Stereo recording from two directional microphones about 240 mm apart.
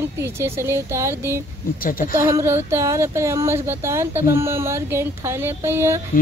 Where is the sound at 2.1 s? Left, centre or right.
Centre.